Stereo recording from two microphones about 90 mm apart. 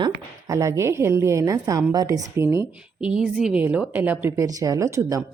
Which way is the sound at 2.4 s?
30° right (ahead or behind).